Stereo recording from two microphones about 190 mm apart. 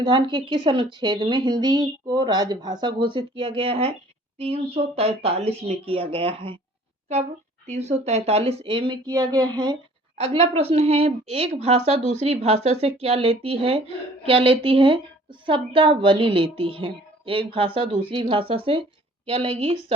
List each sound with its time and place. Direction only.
0.0 s a woman's voice: 25° right (ahead or behind)
7.7 s a woman's voice: 35° right (ahead or behind)